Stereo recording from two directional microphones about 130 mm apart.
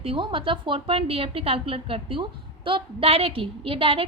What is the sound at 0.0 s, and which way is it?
A woman's voice, 40° right (ahead or behind).